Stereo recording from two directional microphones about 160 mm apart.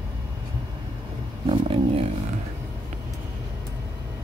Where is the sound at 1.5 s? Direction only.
35° right (ahead or behind).